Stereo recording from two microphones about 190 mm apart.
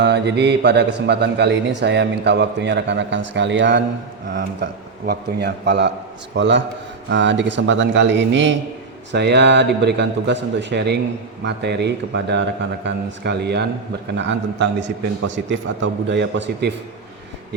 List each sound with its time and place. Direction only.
0.0 s a man's voice: 65° right (ahead or behind)